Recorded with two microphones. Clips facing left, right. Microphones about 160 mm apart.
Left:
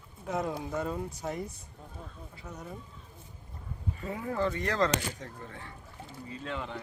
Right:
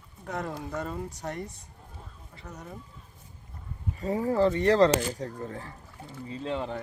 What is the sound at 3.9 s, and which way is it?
Speech, 35° right (ahead or behind).